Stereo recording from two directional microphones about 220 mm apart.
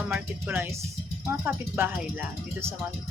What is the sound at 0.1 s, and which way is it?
Speech, 10° right (ahead or behind).